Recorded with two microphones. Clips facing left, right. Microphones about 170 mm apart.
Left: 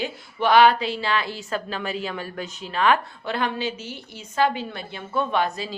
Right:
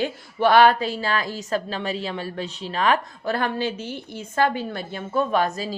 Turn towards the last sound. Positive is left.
turn(degrees=-45)  # may be behind; listen again after turning